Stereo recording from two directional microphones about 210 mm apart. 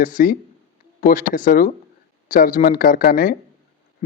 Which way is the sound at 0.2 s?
40° left (ahead or behind).